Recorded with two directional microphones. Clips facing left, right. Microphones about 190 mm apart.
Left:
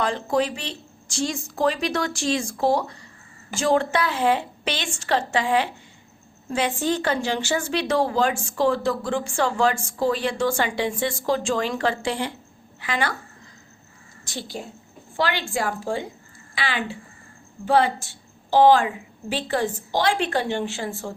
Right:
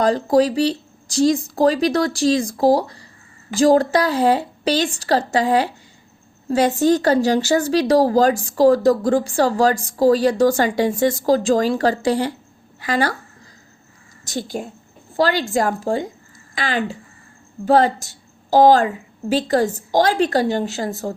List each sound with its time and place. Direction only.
0.0 s speech: 40° right (ahead or behind)
14.3 s a woman's voice: 45° right (ahead or behind)